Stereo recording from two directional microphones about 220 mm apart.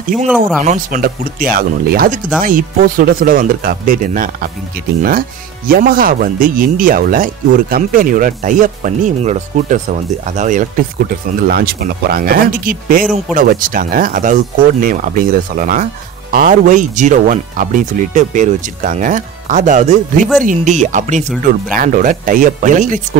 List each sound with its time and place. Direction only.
0.7 s speech: 40° right (ahead or behind)
5.7 s speech: 40° right (ahead or behind)